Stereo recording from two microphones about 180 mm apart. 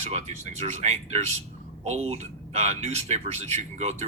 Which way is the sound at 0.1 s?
40° right (ahead or behind).